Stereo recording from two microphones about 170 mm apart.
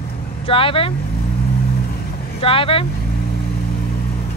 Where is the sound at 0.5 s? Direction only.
30° left (ahead or behind).